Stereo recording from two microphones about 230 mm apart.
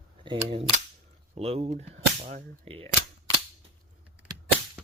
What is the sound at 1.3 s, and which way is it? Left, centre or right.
Speech, right.